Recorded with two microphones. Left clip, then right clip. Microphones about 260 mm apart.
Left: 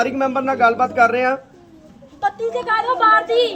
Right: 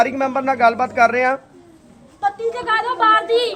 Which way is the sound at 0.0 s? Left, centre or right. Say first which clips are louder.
Right 1 dB; centre.